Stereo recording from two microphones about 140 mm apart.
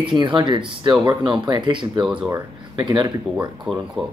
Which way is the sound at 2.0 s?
5° right (ahead or behind).